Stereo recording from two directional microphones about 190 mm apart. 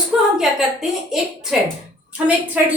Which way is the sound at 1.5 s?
5° right (ahead or behind).